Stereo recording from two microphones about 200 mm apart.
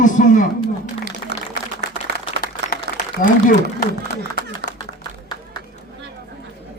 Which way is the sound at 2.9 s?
55° right (ahead or behind).